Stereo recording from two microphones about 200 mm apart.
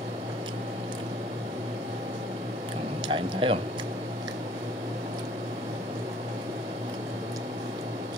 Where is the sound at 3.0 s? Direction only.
25° right (ahead or behind).